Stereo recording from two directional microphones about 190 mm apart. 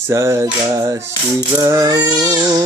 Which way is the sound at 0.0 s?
15° right (ahead or behind).